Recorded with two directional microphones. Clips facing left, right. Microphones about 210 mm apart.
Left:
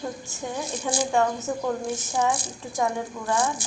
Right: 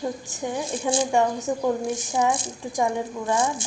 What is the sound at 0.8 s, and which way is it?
A woman's voice, 20° right (ahead or behind).